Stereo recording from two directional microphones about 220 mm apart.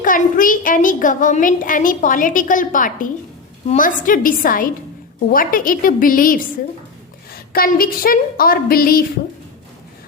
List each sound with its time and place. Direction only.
0.0 s a child's voice: 40° left (ahead or behind)